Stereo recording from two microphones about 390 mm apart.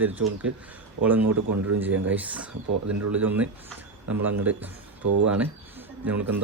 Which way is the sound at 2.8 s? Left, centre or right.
Right.